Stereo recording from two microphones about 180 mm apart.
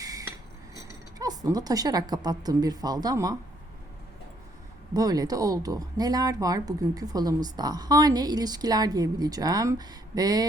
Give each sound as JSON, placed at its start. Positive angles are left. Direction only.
{"t": 0.0, "sound": "cutlery", "side_deg": -20}
{"t": 4.9, "sound": "speech", "side_deg": -20}